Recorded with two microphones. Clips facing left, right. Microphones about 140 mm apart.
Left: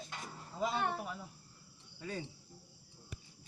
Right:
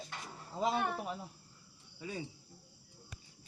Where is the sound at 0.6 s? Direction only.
25° right (ahead or behind).